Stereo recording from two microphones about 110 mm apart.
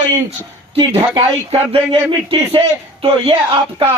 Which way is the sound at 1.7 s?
60° right (ahead or behind).